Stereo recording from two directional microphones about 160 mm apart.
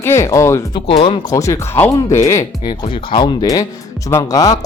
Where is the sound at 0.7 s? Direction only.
30° left (ahead or behind).